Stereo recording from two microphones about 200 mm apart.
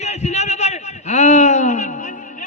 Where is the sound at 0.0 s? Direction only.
35° left (ahead or behind).